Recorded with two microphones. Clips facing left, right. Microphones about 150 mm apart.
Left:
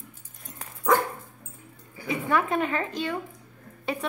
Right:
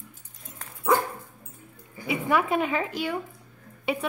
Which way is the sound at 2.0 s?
15° right (ahead or behind).